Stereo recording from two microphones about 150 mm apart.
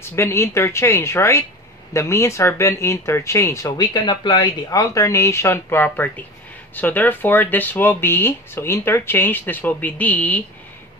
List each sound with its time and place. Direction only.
0.1 s speech: 15° left (ahead or behind)